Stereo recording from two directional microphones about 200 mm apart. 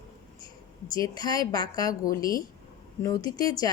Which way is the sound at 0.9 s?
20° left (ahead or behind).